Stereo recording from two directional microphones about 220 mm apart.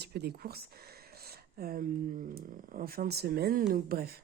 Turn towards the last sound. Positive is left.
turn(degrees=-40)  # may be behind; listen again after turning